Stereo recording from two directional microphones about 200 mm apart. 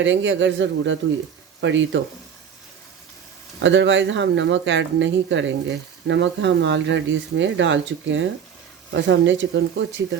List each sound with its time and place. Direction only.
0.0 s speech: 70° right (ahead or behind)
3.6 s speech: 65° right (ahead or behind)